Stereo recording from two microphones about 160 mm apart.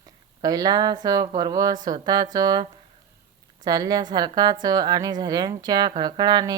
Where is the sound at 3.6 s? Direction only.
25° right (ahead or behind).